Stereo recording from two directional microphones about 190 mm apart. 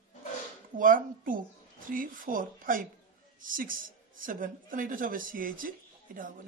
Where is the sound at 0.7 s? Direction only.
45° right (ahead or behind).